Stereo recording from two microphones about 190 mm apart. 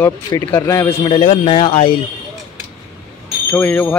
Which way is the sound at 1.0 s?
30° left (ahead or behind).